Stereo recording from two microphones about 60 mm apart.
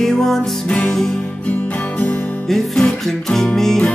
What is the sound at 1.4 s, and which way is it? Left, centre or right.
Music, left.